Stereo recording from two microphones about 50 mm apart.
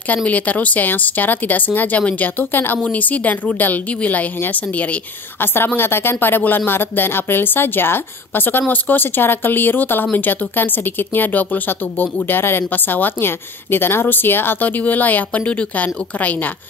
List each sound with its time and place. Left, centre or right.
0.1 s speech: left
5.4 s speech: left
14.8 s speech: left